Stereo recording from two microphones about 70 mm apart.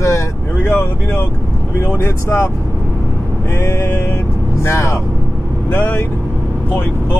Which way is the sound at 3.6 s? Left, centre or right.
Left.